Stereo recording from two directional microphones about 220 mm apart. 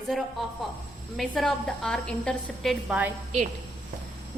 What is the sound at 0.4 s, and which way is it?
A woman's voice, centre (ahead or behind).